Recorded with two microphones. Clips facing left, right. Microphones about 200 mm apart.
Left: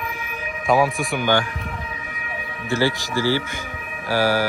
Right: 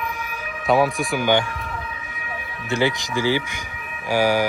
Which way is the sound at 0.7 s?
Centre (ahead or behind).